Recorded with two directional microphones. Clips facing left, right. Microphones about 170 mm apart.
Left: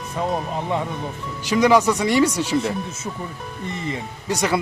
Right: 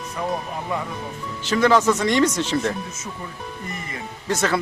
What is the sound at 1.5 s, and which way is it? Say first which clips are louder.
Speech: left 1 dB; 15° left (ahead or behind).